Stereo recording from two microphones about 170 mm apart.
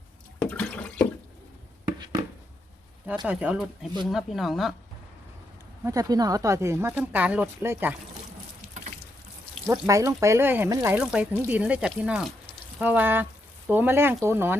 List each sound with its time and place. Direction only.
0.4 s water: 10° left (ahead or behind)
3.2 s speech: 5° right (ahead or behind)
5.8 s speech: 20° right (ahead or behind)
9.6 s speech: 15° right (ahead or behind)